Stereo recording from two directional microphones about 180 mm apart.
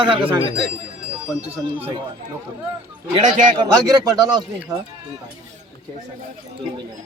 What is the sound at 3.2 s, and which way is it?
Speech, 45° right (ahead or behind).